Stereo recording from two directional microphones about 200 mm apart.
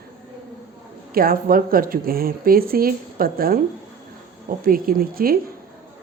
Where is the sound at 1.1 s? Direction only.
45° right (ahead or behind).